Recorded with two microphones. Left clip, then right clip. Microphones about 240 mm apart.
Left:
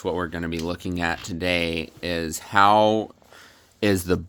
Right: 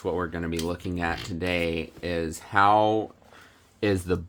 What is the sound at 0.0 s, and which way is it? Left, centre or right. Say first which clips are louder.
Speech: left 2 dB; left.